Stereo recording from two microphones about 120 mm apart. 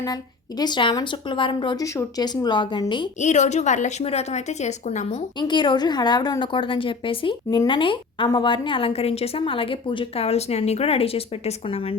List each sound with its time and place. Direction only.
0.6 s a woman's voice: 40° left (ahead or behind)
1.8 s a woman's voice: 30° left (ahead or behind)
3.2 s a woman's voice: 80° left
5.4 s a woman's voice: 40° left (ahead or behind)